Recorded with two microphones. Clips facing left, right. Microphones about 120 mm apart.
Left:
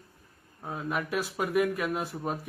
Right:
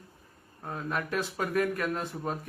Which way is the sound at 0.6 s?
5° left (ahead or behind).